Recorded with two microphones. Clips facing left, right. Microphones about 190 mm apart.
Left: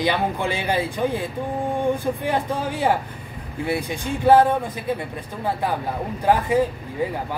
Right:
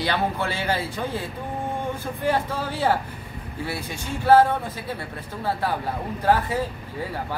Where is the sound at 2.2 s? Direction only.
15° left (ahead or behind).